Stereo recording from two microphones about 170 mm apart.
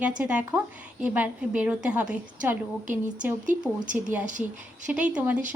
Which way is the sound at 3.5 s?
50° right (ahead or behind).